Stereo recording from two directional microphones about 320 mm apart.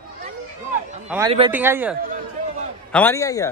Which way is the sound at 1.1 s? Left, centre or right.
Centre.